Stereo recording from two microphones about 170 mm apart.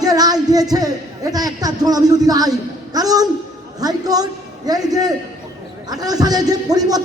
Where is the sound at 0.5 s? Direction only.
20° right (ahead or behind).